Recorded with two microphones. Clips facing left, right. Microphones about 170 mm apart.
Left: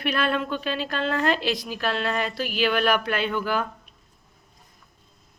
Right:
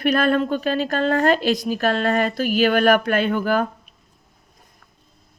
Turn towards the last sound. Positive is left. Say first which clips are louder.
# right 6 dB
turn(degrees=-45)  # may be behind; listen again after turning